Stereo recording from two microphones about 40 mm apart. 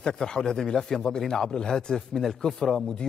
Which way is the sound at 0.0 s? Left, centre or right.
Centre.